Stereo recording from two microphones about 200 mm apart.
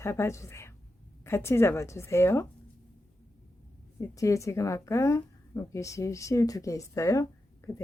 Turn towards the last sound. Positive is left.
turn(degrees=15)  # may be behind; listen again after turning